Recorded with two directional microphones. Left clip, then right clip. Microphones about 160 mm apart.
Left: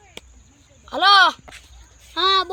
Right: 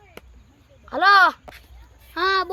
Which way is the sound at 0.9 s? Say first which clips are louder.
Left 1 dB; 10° right (ahead or behind).